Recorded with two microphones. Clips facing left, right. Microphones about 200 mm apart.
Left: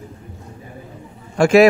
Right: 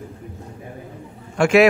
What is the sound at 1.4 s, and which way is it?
Speech, 40° left (ahead or behind).